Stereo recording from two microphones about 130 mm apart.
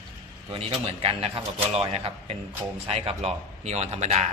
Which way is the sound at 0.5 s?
45° right (ahead or behind).